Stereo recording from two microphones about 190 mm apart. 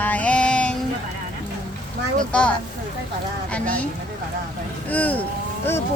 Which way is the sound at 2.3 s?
5° left (ahead or behind).